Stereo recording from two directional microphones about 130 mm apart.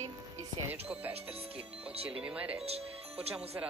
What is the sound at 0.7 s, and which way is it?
Music, 10° right (ahead or behind).